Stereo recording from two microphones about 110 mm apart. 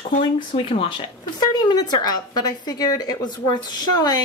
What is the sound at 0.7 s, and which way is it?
Speech, 55° left (ahead or behind).